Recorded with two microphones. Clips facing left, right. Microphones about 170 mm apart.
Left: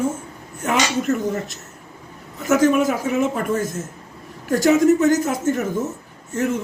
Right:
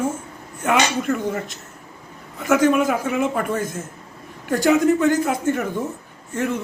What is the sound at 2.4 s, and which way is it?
Speech, 40° left (ahead or behind).